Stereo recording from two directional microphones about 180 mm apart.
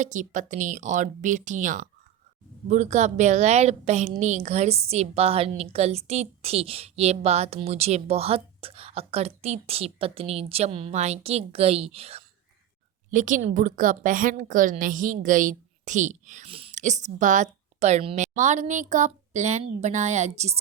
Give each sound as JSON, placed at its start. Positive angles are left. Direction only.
{"t": 0.0, "sound": "a woman's voice", "side_deg": -45}
{"t": 13.1, "sound": "a woman's voice", "side_deg": -45}